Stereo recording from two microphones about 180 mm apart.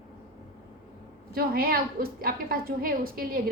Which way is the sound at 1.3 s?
55° right (ahead or behind).